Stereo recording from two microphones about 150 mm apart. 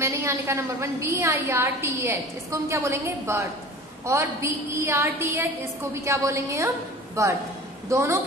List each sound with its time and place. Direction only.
0.0 s a woman's voice: 20° right (ahead or behind)